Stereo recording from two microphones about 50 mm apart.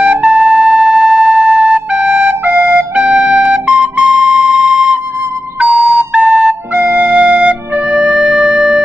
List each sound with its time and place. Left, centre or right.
0.0 s music: right
4.0 s flute: centre
5.7 s flute: right
6.2 s flute: centre
6.7 s flute: right
8.1 s music: centre